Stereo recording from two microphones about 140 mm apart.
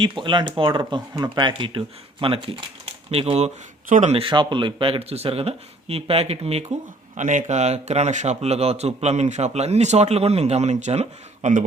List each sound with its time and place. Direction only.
0.0 s speech: 35° right (ahead or behind)
3.8 s speech: 70° right (ahead or behind)
4.1 s speech: 40° right (ahead or behind)
7.2 s speech: 65° right (ahead or behind)